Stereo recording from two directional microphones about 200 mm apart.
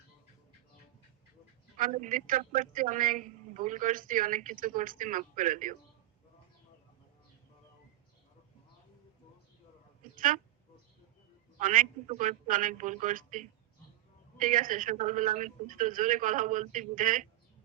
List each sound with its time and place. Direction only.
1.8 s a woman's voice: 40° right (ahead or behind)
10.2 s speech: 45° right (ahead or behind)
11.6 s a woman's voice: 40° right (ahead or behind)